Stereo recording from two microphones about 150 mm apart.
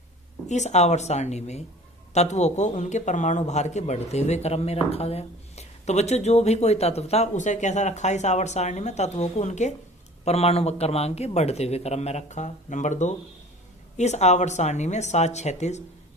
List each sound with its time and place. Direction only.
0.4 s speech: 50° left (ahead or behind)